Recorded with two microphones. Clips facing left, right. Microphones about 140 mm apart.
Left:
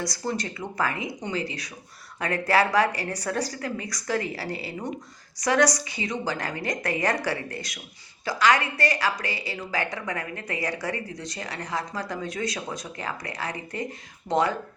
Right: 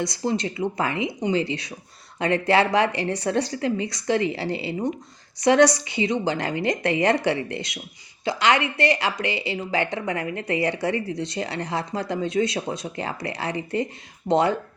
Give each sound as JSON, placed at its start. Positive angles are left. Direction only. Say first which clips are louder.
{"t": 0.0, "sound": "speech", "louder": "right 5 dB", "side_deg": -25}